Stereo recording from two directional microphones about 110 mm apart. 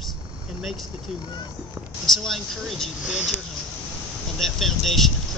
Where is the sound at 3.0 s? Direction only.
10° right (ahead or behind).